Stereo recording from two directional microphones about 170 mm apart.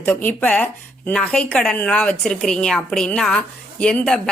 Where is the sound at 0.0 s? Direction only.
10° left (ahead or behind).